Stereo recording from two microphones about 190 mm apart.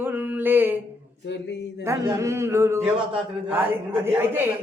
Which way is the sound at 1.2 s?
65° left (ahead or behind).